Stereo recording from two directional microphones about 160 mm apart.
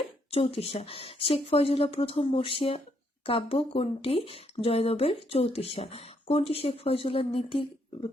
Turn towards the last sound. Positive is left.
turn(degrees=35)  # may be behind; listen again after turning